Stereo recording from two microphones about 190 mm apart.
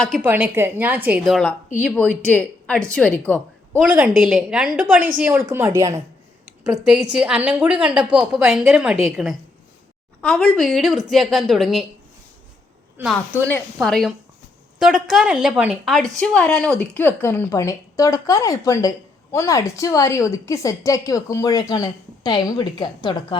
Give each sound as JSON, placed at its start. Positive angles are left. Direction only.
{"t": 0.2, "sound": "a woman's voice", "side_deg": -10}
{"t": 3.9, "sound": "a woman's voice", "side_deg": -5}
{"t": 7.4, "sound": "a woman's voice", "side_deg": -5}
{"t": 13.0, "sound": "a woman's voice", "side_deg": -5}